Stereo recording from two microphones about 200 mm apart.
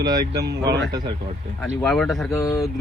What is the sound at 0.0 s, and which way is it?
Speech, 20° right (ahead or behind).